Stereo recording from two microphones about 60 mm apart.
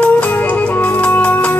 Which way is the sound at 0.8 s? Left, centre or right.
Left.